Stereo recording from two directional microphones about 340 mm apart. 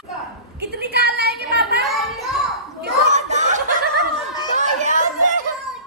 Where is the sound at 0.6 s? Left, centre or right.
Right.